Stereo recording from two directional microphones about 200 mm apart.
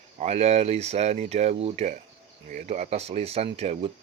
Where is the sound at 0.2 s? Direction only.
30° right (ahead or behind).